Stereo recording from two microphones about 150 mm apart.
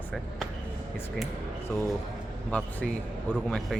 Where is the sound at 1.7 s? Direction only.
15° left (ahead or behind).